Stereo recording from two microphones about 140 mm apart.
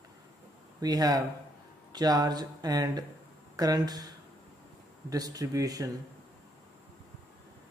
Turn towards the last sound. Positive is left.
turn(degrees=-25)  # may be behind; listen again after turning